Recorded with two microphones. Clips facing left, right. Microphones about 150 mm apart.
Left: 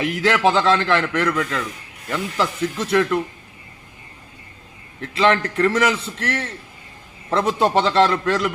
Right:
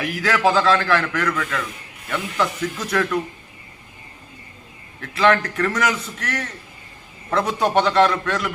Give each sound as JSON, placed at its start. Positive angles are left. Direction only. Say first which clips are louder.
{"t": 0.0, "sound": "a man's voice", "louder": "left 2 dB", "side_deg": 25}
{"t": 4.9, "sound": "a man's voice", "louder": "even", "side_deg": 25}